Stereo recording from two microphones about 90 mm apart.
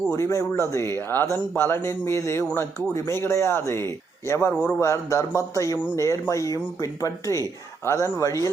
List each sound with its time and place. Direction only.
0.1 s speech: 35° left (ahead or behind)